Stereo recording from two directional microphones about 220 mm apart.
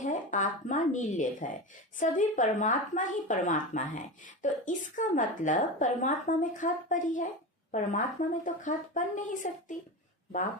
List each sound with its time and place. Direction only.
0.0 s speech: 35° left (ahead or behind)